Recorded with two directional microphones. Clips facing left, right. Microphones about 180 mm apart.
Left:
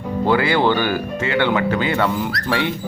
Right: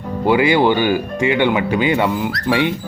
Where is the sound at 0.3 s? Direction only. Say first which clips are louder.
Right 3 dB; 15° right (ahead or behind).